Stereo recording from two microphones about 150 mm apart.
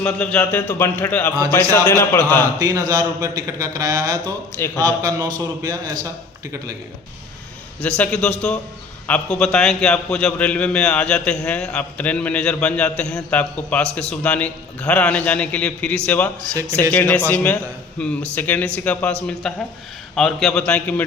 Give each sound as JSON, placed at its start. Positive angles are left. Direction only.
{"t": 0.0, "sound": "a man's voice", "side_deg": 10}
{"t": 1.3, "sound": "a man's voice", "side_deg": -30}
{"t": 1.7, "sound": "a man's voice", "side_deg": 15}
{"t": 2.4, "sound": "a man's voice", "side_deg": -25}
{"t": 4.5, "sound": "a man's voice", "side_deg": 15}
{"t": 4.8, "sound": "a man's voice", "side_deg": -25}
{"t": 7.8, "sound": "a man's voice", "side_deg": 10}